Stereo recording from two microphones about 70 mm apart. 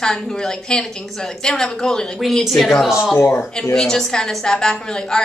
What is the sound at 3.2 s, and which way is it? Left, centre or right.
Speech, left.